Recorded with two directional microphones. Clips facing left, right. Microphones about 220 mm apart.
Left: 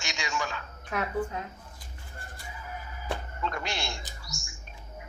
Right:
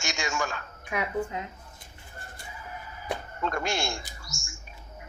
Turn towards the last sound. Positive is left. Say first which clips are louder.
# even
turn(degrees=-45)  # may be behind; listen again after turning